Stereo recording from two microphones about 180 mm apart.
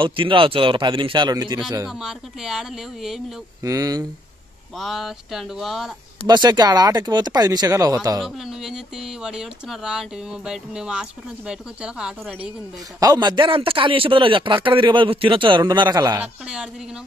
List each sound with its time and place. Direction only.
0.0 s a man's voice: 30° right (ahead or behind)
1.9 s speech: centre (ahead or behind)
3.6 s a man's voice: 20° right (ahead or behind)
4.7 s speech: centre (ahead or behind)
6.2 s a man's voice: 25° right (ahead or behind)
8.2 s speech: centre (ahead or behind)
13.0 s a man's voice: 20° right (ahead or behind)